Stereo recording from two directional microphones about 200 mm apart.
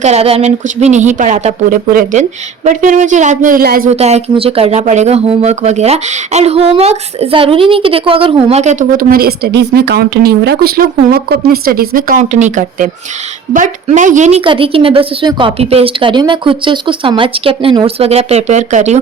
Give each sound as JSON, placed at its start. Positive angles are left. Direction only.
{"t": 0.0, "sound": "speech", "side_deg": -30}
{"t": 3.8, "sound": "a woman's voice", "side_deg": -35}